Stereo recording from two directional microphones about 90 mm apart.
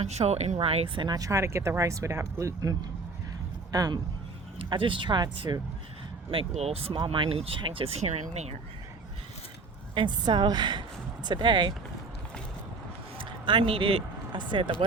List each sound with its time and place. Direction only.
0.2 s speech: 60° right (ahead or behind)
0.6 s speech: 90° right
1.0 s a man's voice: 45° right (ahead or behind)
4.5 s speech: 70° right (ahead or behind)
6.3 s speech: 85° right
9.9 s speech: 65° right (ahead or behind)
13.1 s speech: 65° right (ahead or behind)